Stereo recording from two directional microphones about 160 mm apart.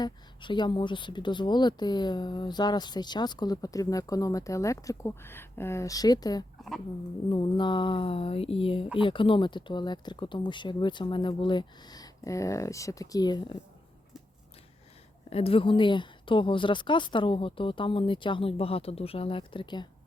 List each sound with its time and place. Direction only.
0.0 s a woman's voice: 30° left (ahead or behind)
15.3 s a woman's voice: 35° left (ahead or behind)